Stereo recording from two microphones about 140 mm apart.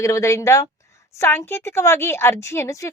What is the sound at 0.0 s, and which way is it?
Speech, 20° left (ahead or behind).